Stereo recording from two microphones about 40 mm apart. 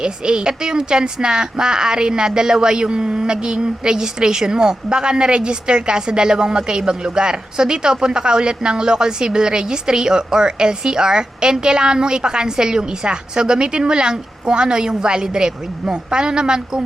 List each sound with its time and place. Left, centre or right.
0.0 s a woman's voice: right